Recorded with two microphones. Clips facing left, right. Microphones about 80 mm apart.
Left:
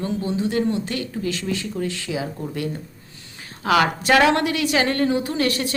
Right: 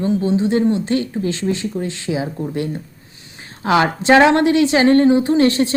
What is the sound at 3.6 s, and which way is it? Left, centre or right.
A woman's voice, right.